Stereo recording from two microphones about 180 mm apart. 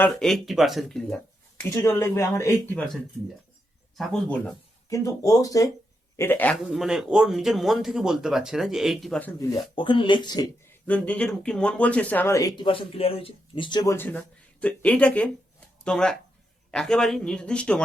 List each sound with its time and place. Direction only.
0.0 s speech: 5° left (ahead or behind)
1.7 s speech: 15° left (ahead or behind)
6.7 s speech: centre (ahead or behind)
9.4 s speech: 25° left (ahead or behind)
10.8 s speech: 10° left (ahead or behind); by 13.9 s 25° left (ahead or behind)
13.9 s speech: 10° left (ahead or behind)